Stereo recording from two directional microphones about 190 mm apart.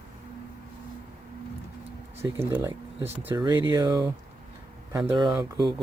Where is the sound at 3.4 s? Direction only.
25° right (ahead or behind).